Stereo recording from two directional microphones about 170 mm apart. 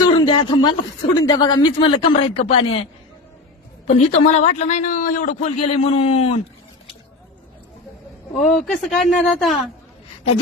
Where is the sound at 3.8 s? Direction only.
45° left (ahead or behind).